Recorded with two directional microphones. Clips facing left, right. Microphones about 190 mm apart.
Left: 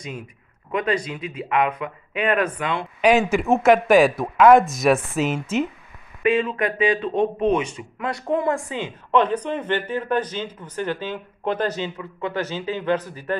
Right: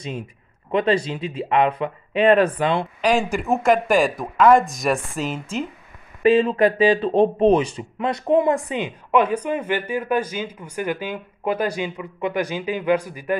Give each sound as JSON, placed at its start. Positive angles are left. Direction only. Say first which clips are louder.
{"t": 0.7, "sound": "speech", "louder": "right 4 dB", "side_deg": -30}
{"t": 3.0, "sound": "speech", "louder": "left 6 dB", "side_deg": 5}
{"t": 6.2, "sound": "speech", "louder": "right 5 dB", "side_deg": -35}
{"t": 8.0, "sound": "speech", "louder": "right 5 dB", "side_deg": -20}